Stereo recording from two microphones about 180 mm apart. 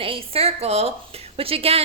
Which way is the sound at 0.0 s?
30° right (ahead or behind).